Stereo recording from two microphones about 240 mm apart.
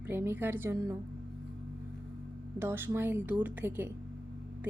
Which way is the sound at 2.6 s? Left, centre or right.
Centre.